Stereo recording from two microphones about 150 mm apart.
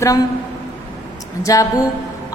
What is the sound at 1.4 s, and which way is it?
Speech, 20° left (ahead or behind).